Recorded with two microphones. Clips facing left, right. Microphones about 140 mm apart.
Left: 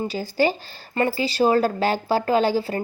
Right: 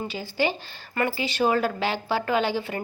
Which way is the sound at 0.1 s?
40° left (ahead or behind).